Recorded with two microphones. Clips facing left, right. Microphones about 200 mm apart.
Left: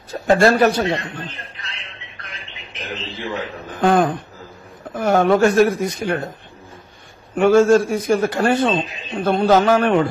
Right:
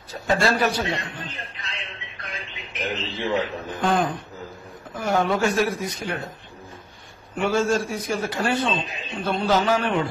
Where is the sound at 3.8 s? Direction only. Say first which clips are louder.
Left 7 dB; 55° left (ahead or behind).